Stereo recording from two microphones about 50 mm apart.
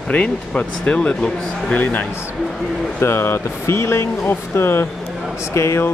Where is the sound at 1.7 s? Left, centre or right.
Left.